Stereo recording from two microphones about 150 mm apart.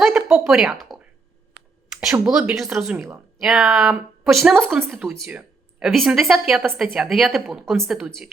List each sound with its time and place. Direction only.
0.0 s speech: 5° right (ahead or behind)
2.0 s speech: 5° right (ahead or behind)
5.3 s a sound: 10° right (ahead or behind)
5.9 s speech: centre (ahead or behind)